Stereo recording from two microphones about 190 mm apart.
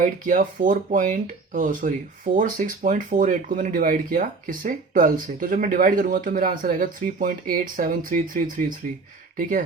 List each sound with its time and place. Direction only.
0.0 s speech: 45° right (ahead or behind)